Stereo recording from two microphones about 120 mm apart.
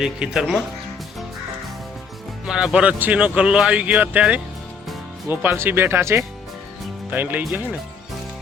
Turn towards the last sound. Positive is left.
turn(degrees=-15)  # may be behind; listen again after turning